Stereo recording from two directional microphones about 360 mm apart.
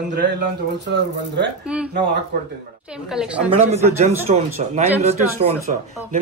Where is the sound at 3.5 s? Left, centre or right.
Centre.